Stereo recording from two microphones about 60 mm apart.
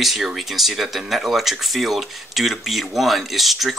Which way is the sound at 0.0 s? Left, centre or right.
Centre.